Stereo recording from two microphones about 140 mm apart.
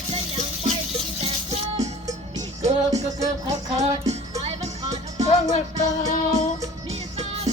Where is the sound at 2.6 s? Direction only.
25° right (ahead or behind).